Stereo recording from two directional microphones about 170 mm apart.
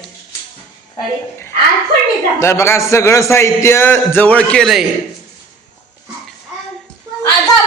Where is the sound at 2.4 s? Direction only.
15° left (ahead or behind).